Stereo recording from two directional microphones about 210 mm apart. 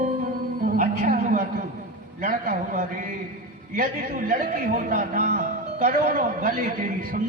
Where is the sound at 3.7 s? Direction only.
40° right (ahead or behind).